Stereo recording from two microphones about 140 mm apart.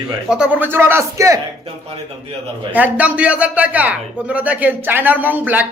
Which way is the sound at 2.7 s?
10° right (ahead or behind).